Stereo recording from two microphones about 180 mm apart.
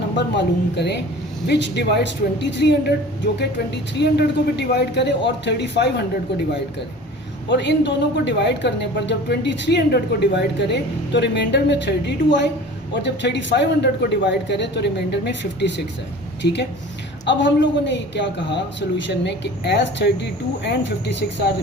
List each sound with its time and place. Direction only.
0.2 s speech: 70° left (ahead or behind)
4.0 s speech: 70° left (ahead or behind)
7.4 s speech: 75° left (ahead or behind)